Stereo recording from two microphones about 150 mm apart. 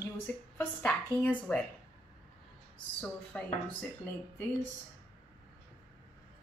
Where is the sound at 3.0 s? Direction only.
10° left (ahead or behind).